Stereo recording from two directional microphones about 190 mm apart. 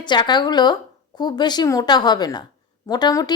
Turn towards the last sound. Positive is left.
turn(degrees=20)  # may be behind; listen again after turning